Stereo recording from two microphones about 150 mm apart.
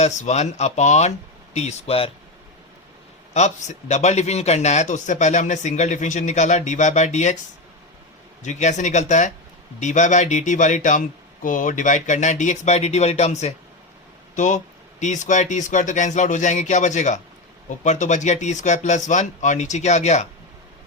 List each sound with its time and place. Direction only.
0.0 s speech: 50° left (ahead or behind)
3.3 s speech: 50° left (ahead or behind)
8.4 s speech: 50° left (ahead or behind)